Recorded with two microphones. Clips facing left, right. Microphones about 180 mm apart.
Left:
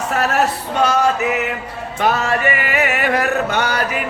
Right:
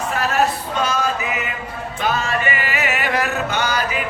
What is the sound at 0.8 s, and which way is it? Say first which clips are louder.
Music: left 6 dB; 65° left (ahead or behind).